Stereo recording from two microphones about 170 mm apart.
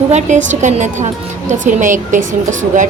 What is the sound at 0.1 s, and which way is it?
A woman's voice, 45° right (ahead or behind).